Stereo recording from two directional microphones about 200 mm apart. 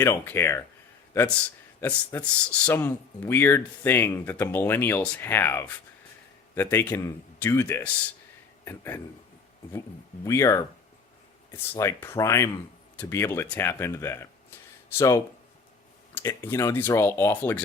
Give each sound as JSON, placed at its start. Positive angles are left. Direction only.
{"t": 0.0, "sound": "a man's voice", "side_deg": 10}
{"t": 1.8, "sound": "a man's voice", "side_deg": 10}
{"t": 10.2, "sound": "a man's voice", "side_deg": 15}